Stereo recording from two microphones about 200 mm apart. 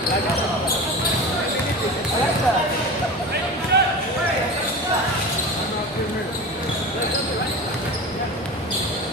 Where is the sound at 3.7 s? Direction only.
55° right (ahead or behind).